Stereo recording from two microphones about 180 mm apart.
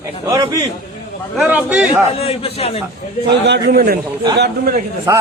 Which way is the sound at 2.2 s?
30° left (ahead or behind).